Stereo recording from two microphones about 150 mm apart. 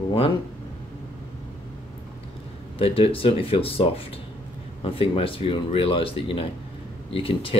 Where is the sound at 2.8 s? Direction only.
40° left (ahead or behind).